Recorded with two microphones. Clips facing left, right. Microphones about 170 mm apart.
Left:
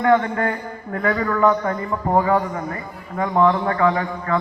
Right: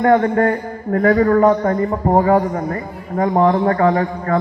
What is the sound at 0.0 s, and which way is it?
A man's voice, 45° right (ahead or behind).